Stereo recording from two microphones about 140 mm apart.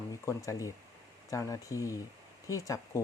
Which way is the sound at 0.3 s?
20° left (ahead or behind).